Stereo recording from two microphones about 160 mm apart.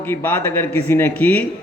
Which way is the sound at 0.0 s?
15° left (ahead or behind).